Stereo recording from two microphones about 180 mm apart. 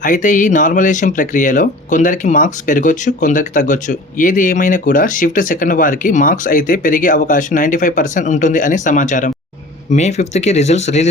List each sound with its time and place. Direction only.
0.0 s speech: 45° left (ahead or behind)